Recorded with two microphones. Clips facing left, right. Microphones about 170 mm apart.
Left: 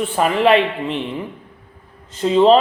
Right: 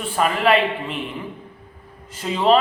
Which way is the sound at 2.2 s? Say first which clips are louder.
Left 6 dB; 30° left (ahead or behind).